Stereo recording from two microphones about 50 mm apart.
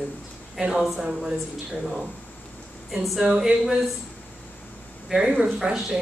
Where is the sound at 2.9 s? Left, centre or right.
Centre.